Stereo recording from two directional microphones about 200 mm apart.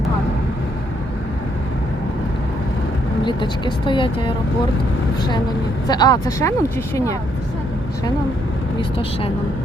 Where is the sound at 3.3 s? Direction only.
25° left (ahead or behind).